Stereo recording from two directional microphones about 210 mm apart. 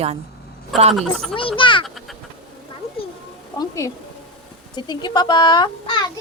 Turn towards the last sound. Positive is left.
turn(degrees=20)  # may be behind; listen again after turning